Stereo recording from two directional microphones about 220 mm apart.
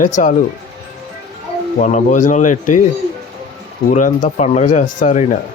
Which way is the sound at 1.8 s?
35° left (ahead or behind).